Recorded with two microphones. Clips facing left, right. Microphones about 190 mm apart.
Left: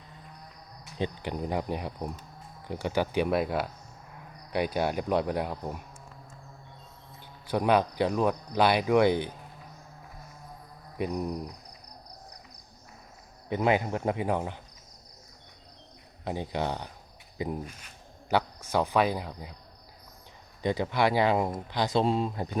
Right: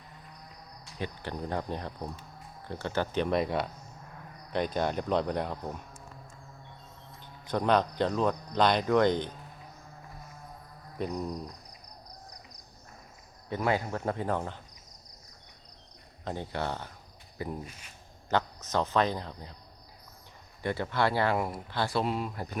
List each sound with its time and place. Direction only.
0.9 s speech: 20° left (ahead or behind)
7.4 s speech: 10° left (ahead or behind)
10.9 s speech: 10° left (ahead or behind)
13.5 s speech: 20° left (ahead or behind)
16.2 s speech: 15° left (ahead or behind)
17.3 s cricket: 15° left (ahead or behind)
18.3 s speech: 10° left (ahead or behind)
20.6 s speech: 15° left (ahead or behind)